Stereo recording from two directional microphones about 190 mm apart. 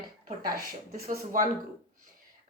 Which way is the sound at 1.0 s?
40° right (ahead or behind).